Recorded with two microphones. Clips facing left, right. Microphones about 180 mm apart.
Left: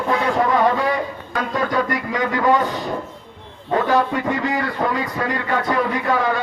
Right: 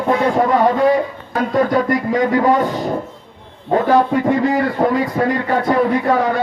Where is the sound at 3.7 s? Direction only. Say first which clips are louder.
Right 4 dB; 40° right (ahead or behind).